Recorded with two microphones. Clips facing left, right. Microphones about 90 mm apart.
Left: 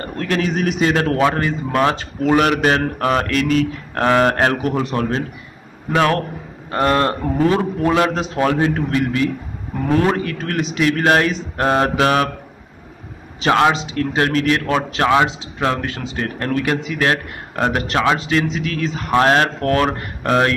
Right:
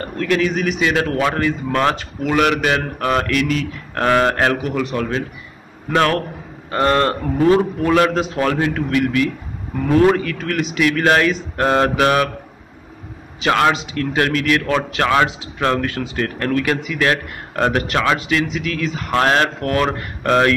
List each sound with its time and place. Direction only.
0.2 s speech: 35° left (ahead or behind)
1.7 s a man's voice: 20° left (ahead or behind)
2.0 s speech: 30° left (ahead or behind)
5.9 s a man's voice: 25° left (ahead or behind)
13.4 s a man's voice: 30° left (ahead or behind)